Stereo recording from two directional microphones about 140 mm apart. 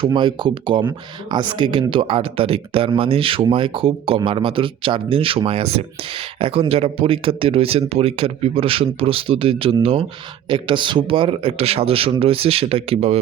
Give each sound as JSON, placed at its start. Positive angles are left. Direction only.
{"t": 0.0, "sound": "speech", "side_deg": -35}